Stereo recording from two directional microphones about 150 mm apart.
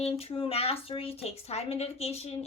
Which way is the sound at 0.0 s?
40° left (ahead or behind).